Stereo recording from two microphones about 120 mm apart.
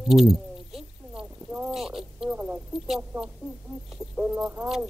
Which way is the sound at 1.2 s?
15° right (ahead or behind).